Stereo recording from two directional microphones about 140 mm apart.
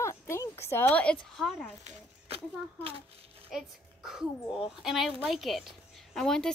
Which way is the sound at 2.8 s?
45° right (ahead or behind).